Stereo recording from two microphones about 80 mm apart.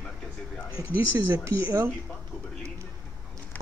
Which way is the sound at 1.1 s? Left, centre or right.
Right.